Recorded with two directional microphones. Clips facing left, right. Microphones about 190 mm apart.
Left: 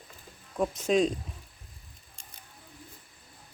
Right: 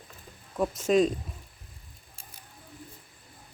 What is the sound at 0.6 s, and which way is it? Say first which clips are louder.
Speech: right 2 dB; centre (ahead or behind).